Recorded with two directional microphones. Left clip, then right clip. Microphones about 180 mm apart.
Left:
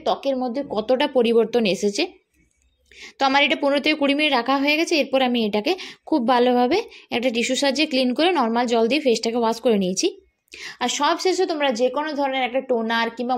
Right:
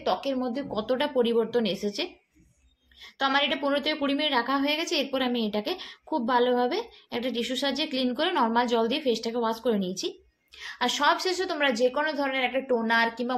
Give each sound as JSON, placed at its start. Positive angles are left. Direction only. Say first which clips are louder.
{"t": 0.0, "sound": "speech", "louder": "left 5 dB", "side_deg": 35}